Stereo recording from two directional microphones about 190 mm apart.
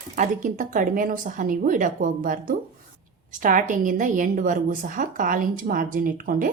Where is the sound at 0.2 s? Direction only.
40° right (ahead or behind).